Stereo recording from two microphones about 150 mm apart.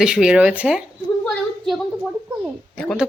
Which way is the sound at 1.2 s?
Centre (ahead or behind).